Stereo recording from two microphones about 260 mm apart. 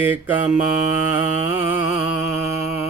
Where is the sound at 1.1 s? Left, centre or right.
Centre.